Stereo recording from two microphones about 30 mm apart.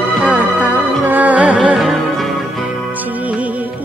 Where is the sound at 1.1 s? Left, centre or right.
Right.